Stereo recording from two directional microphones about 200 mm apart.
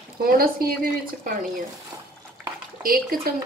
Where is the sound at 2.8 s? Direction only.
45° right (ahead or behind).